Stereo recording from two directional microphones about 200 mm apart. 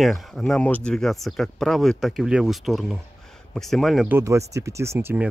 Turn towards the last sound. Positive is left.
turn(degrees=-10)  # may be behind; listen again after turning